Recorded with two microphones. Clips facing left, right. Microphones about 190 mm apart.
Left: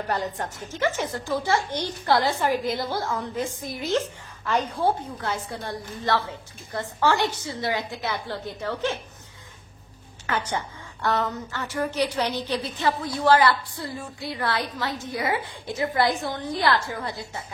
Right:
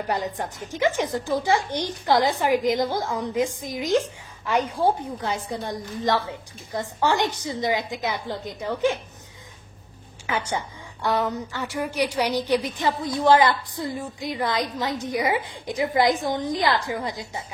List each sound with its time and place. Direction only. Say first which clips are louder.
0.1 s a woman's voice: right 1 dB; 15° right (ahead or behind)
10.2 s a woman's voice: right 1 dB; 10° right (ahead or behind)